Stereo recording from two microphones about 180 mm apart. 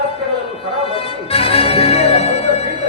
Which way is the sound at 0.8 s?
30° left (ahead or behind).